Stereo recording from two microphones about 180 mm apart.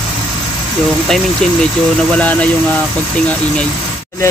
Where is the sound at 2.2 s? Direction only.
10° left (ahead or behind).